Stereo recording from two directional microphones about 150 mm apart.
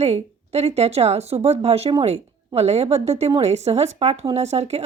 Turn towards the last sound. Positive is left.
turn(degrees=-45)  # may be behind; listen again after turning